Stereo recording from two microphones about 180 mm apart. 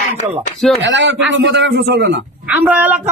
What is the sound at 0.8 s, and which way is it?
A man's voice, 75° right (ahead or behind).